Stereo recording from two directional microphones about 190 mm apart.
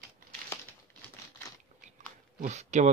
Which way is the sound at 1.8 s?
40° right (ahead or behind).